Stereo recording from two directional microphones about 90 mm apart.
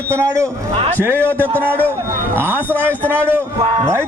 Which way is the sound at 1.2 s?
20° left (ahead or behind).